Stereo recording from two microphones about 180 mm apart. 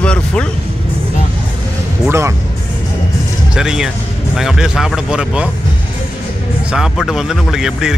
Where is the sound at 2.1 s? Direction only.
15° right (ahead or behind).